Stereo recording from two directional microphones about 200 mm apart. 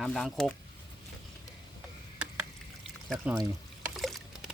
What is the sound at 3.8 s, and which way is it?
Boat, centre (ahead or behind).